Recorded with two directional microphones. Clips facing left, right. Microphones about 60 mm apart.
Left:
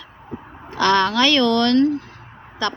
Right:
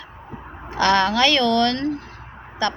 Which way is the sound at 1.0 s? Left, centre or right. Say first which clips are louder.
Left 1 dB; centre.